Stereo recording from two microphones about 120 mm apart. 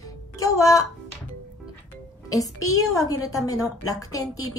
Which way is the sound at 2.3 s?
30° left (ahead or behind).